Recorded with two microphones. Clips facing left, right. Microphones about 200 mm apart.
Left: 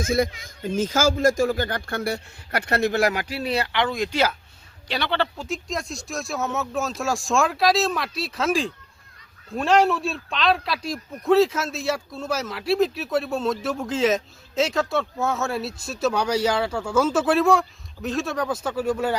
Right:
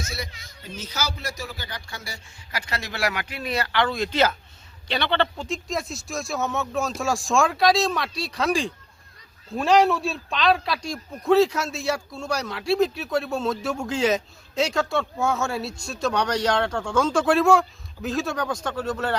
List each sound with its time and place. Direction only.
0.0 s a man's voice: 50° left (ahead or behind); by 19.1 s 10° left (ahead or behind)